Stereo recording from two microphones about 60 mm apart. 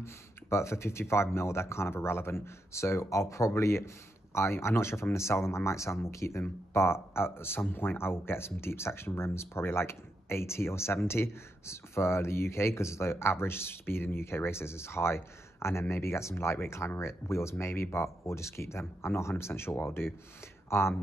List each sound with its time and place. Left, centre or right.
0.0 s speech: left